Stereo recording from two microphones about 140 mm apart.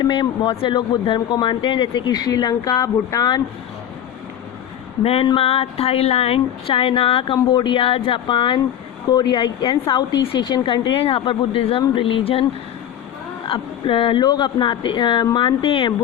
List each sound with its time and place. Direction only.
0.0 s speech: 35° left (ahead or behind)
5.0 s speech: 40° left (ahead or behind)
13.5 s speech: 40° left (ahead or behind)